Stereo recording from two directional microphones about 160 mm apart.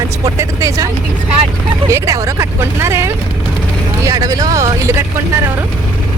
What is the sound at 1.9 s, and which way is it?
Speech, 20° right (ahead or behind).